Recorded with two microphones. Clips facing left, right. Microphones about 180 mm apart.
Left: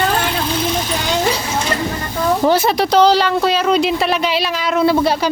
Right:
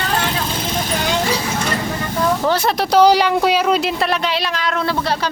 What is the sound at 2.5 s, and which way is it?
Speech, centre (ahead or behind).